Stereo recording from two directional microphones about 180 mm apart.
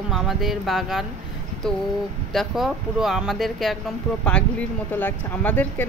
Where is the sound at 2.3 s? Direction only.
Centre (ahead or behind).